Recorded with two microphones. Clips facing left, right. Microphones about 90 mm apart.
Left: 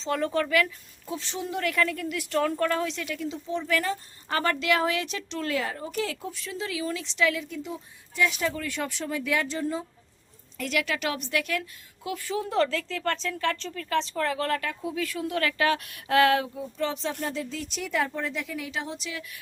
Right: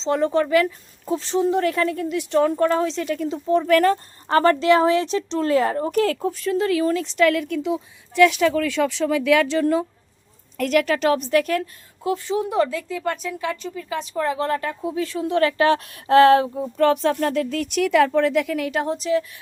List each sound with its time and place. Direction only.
0.0 s a woman's voice: 25° right (ahead or behind); by 4.0 s 55° right (ahead or behind)
4.3 s a woman's voice: 35° right (ahead or behind); by 9.8 s 80° right
10.6 s a woman's voice: 45° right (ahead or behind)
12.1 s a woman's voice: 25° right (ahead or behind)
16.7 s speech: 55° right (ahead or behind); by 19.2 s 40° right (ahead or behind)